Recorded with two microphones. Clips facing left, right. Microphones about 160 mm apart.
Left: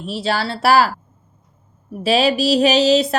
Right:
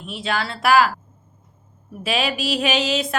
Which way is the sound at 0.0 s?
35° left (ahead or behind).